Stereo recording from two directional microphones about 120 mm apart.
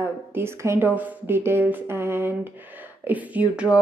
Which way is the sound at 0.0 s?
20° right (ahead or behind).